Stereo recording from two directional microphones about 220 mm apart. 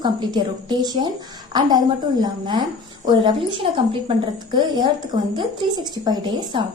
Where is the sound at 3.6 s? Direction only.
25° right (ahead or behind).